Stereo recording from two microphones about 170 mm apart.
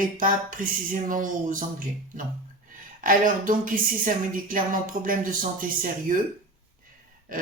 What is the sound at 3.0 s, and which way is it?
Speech, 55° right (ahead or behind).